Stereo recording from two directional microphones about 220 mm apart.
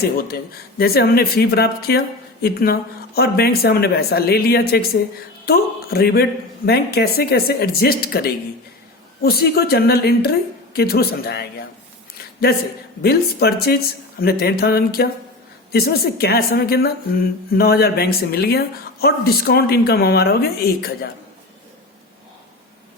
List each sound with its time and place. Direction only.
0.3 s speech: 45° left (ahead or behind)
13.0 s speech: 45° left (ahead or behind)